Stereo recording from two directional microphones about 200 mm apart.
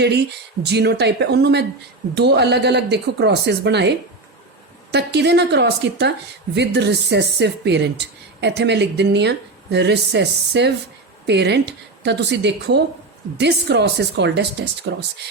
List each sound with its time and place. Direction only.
0.6 s a woman's voice: 55° right (ahead or behind)